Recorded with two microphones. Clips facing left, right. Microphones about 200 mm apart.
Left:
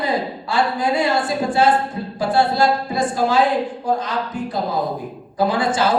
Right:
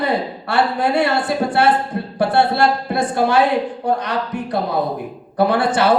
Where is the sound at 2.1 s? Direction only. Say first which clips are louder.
Right 2 dB; 65° right (ahead or behind).